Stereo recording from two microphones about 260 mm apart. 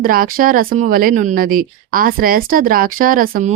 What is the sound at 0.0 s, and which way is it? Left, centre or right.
Speech, right.